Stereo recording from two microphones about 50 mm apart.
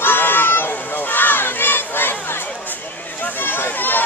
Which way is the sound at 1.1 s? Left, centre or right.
Left.